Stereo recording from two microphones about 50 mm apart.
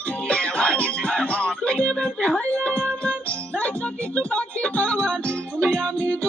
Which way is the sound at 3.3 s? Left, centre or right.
Left.